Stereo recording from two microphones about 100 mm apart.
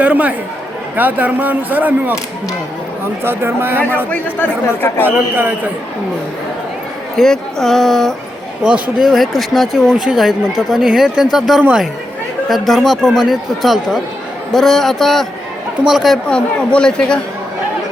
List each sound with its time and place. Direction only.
0.0 s speech: 15° right (ahead or behind)
3.2 s a man's voice: 20° right (ahead or behind)
4.1 s speech: 20° left (ahead or behind)
5.0 s a man's voice: 20° right (ahead or behind)
7.2 s speech: 5° left (ahead or behind)
16.3 s speech: 10° left (ahead or behind)